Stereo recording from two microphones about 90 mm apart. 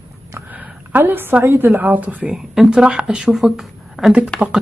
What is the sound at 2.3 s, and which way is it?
Speech, 5° right (ahead or behind).